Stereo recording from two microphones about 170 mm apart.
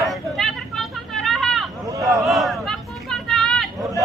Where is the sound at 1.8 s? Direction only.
20° right (ahead or behind).